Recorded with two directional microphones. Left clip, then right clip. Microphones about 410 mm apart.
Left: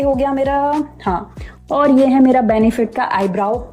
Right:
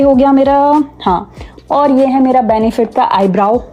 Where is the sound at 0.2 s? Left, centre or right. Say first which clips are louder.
Right 7 dB; centre.